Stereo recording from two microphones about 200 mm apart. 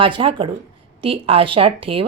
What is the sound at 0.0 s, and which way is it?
A woman's voice, 25° right (ahead or behind).